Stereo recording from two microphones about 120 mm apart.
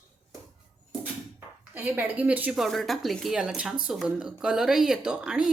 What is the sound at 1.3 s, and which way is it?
Speech, 15° right (ahead or behind).